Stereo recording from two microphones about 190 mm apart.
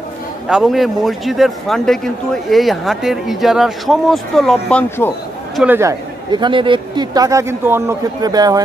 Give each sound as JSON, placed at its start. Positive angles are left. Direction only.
{"t": 0.5, "sound": "a man's voice", "side_deg": 0}
{"t": 5.6, "sound": "a man's voice", "side_deg": -10}